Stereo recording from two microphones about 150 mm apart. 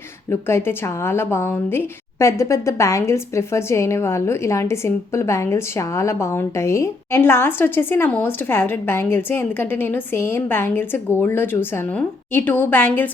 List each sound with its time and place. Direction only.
0.3 s a woman's voice: 15° left (ahead or behind)